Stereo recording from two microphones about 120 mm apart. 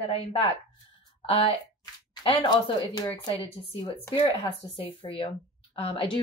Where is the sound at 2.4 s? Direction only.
35° left (ahead or behind).